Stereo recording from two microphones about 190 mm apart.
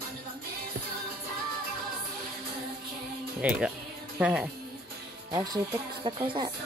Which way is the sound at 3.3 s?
5° right (ahead or behind).